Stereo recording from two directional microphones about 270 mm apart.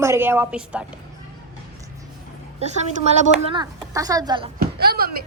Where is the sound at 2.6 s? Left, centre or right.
Right.